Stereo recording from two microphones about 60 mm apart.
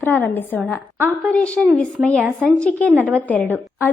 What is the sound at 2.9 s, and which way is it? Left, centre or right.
Speech, right.